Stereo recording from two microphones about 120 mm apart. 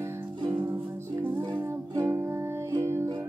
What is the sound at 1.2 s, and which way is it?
Music, 15° right (ahead or behind).